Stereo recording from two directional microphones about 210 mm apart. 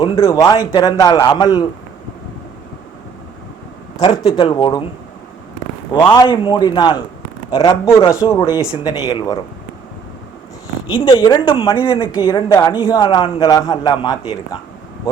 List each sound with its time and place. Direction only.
0.3 s a man's voice: 15° left (ahead or behind)
3.9 s a man's voice: 20° left (ahead or behind)
5.9 s a man's voice: 20° left (ahead or behind)
10.9 s a man's voice: 25° left (ahead or behind)